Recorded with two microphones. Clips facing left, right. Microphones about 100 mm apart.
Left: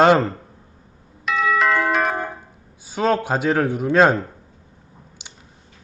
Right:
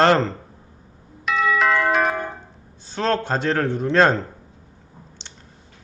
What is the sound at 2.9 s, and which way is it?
A man's voice, 10° left (ahead or behind).